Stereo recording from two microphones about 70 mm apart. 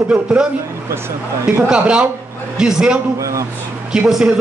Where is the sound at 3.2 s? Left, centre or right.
Right.